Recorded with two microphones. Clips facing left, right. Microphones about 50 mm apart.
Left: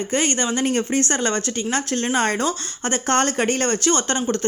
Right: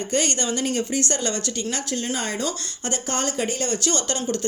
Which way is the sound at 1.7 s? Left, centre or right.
Left.